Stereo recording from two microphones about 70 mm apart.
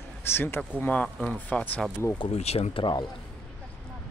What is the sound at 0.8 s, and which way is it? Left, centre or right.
Speech, centre.